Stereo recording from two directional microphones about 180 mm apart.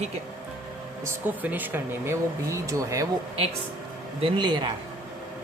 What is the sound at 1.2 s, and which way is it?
Speech, 10° right (ahead or behind).